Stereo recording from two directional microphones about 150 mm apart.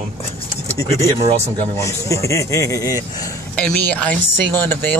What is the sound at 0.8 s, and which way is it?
A man's voice, 20° left (ahead or behind).